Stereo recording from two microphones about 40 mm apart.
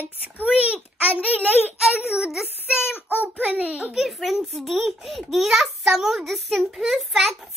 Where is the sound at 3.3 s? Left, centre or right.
Right.